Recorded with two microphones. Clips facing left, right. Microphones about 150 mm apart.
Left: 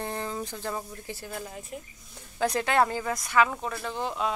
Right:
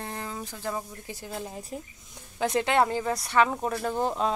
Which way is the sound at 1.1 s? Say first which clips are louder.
Right 1 dB; 20° right (ahead or behind).